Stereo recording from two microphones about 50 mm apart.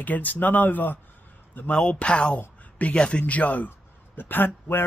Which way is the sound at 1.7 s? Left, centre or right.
Left.